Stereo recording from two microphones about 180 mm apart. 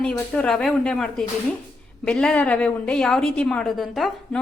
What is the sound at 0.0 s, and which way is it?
A woman's voice, 5° left (ahead or behind).